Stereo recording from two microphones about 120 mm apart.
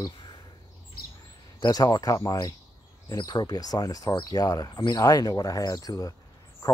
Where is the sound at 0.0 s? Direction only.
40° left (ahead or behind).